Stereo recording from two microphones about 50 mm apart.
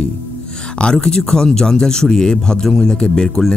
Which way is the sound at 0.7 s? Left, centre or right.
Centre.